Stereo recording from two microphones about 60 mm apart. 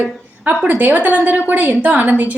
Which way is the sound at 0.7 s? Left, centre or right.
Right.